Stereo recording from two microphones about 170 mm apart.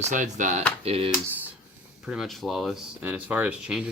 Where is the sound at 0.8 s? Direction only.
35° right (ahead or behind).